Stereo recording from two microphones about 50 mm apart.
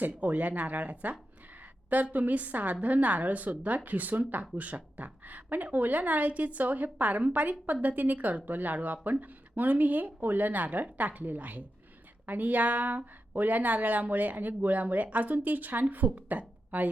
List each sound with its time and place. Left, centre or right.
0.0 s speech: right